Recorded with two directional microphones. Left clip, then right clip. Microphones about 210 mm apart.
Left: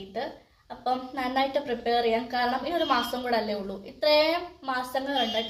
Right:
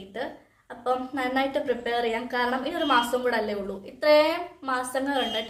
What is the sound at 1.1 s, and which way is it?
A woman's voice, 15° right (ahead or behind).